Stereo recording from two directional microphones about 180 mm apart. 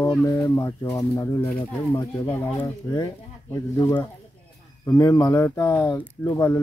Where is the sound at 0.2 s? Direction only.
15° left (ahead or behind).